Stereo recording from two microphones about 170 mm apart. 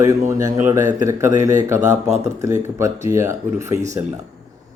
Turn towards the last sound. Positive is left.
turn(degrees=-15)  # may be behind; listen again after turning